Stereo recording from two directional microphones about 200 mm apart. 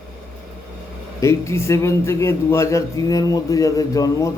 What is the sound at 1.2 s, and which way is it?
A man's voice, 15° left (ahead or behind).